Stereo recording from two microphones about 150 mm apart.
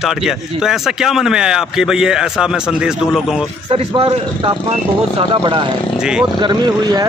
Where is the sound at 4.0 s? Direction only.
35° right (ahead or behind).